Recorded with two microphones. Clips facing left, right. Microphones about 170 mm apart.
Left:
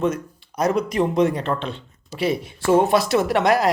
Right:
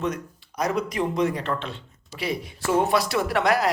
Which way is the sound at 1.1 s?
25° left (ahead or behind).